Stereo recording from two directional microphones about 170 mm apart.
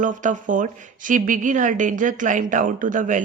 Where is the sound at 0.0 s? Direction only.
50° right (ahead or behind).